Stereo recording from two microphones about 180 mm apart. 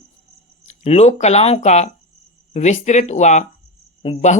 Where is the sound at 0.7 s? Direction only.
35° left (ahead or behind).